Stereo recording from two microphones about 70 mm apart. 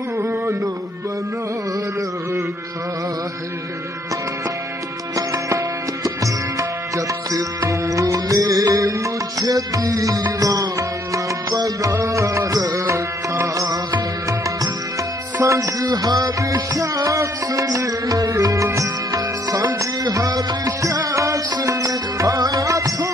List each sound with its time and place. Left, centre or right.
0.2 s a sound: right
5.1 s music: right
7.0 s music: right
11.9 s music: right
13.6 s music: right
15.4 s music: right